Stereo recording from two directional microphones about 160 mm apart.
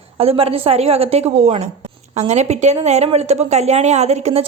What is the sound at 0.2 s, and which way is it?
Speech, 40° right (ahead or behind).